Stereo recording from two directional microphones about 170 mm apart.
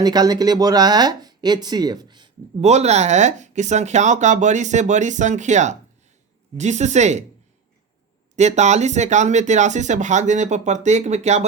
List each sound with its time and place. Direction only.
0.0 s speech: 25° right (ahead or behind)
2.6 s speech: 40° right (ahead or behind)
8.4 s speech: 40° right (ahead or behind)